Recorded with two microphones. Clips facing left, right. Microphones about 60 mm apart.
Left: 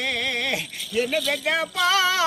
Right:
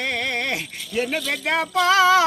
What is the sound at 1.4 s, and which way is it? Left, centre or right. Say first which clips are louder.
Speech: right 7 dB; right.